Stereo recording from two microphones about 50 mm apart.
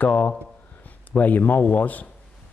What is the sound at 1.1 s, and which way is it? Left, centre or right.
Speech, left.